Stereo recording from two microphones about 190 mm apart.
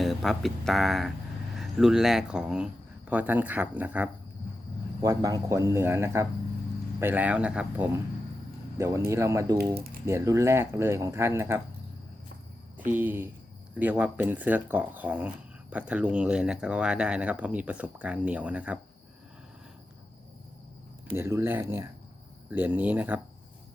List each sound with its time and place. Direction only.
0.0 s speech: centre (ahead or behind)
4.9 s speech: 20° right (ahead or behind)
9.0 s speech: 15° right (ahead or behind)
12.7 s speech: 10° right (ahead or behind)
21.2 s speech: 15° right (ahead or behind)